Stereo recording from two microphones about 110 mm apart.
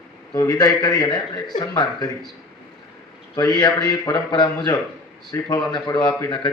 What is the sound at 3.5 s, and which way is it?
A man's voice, 40° left (ahead or behind).